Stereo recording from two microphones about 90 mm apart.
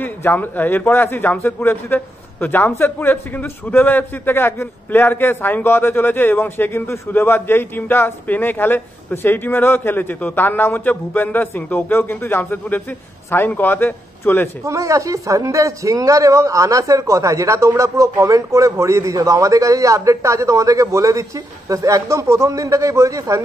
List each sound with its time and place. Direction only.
0.0 s a man's voice: 20° left (ahead or behind)
14.6 s a man's voice: 35° right (ahead or behind)